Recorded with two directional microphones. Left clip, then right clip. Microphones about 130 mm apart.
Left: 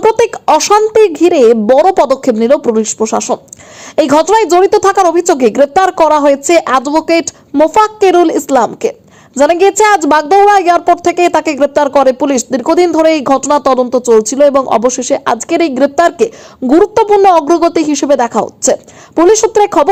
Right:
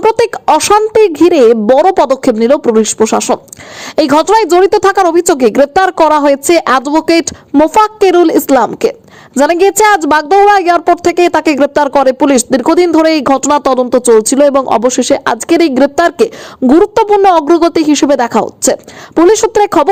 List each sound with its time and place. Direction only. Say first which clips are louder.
0.0 s a woman's voice: even; 30° right (ahead or behind)